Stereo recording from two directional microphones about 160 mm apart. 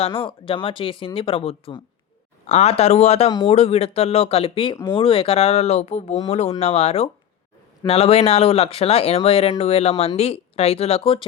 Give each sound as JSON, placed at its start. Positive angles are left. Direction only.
{"t": 0.0, "sound": "speech", "side_deg": 30}
{"t": 3.2, "sound": "speech", "side_deg": 25}
{"t": 3.5, "sound": "speech", "side_deg": 40}